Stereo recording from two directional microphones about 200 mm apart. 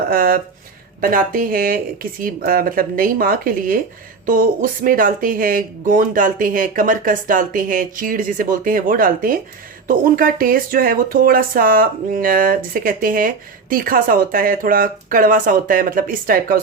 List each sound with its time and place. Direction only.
0.1 s speech: 45° right (ahead or behind)